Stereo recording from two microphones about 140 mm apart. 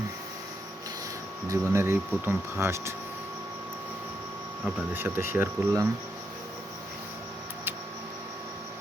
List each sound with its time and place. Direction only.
1.5 s speech: 20° right (ahead or behind)
4.9 s speech: 15° right (ahead or behind)